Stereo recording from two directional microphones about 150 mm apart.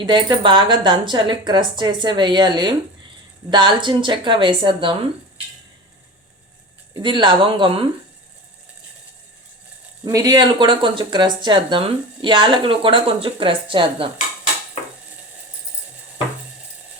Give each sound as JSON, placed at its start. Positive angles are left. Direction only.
{"t": 0.0, "sound": "speech", "side_deg": -30}
{"t": 6.9, "sound": "speech", "side_deg": -30}
{"t": 10.0, "sound": "speech", "side_deg": -25}